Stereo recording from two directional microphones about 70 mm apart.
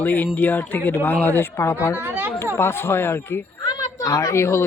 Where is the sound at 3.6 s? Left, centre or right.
Left.